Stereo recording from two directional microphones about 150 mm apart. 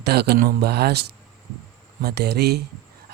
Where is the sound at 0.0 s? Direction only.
90° right.